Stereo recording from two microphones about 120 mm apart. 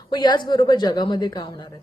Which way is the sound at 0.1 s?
35° left (ahead or behind).